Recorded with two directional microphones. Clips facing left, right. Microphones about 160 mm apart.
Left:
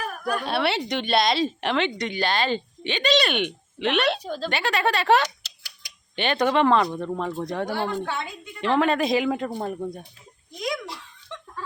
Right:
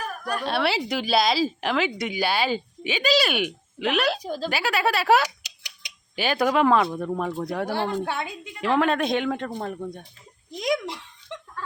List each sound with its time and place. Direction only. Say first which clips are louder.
0.3 s a woman's voice: even; centre (ahead or behind)
7.9 s a woman's voice: right 1 dB; 15° right (ahead or behind)
8.6 s a woman's voice: left 1 dB; centre (ahead or behind)